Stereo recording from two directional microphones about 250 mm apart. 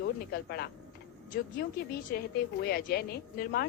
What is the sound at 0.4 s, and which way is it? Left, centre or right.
Speech, left.